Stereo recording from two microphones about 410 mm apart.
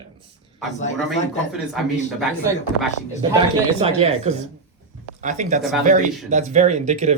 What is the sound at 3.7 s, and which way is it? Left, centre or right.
Speech, centre.